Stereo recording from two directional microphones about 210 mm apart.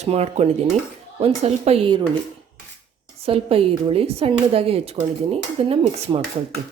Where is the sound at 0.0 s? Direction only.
30° right (ahead or behind).